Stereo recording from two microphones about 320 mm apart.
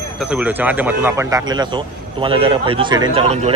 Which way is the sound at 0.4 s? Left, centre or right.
Centre.